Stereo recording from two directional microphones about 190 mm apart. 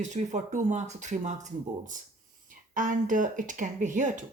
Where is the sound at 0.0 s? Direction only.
40° right (ahead or behind).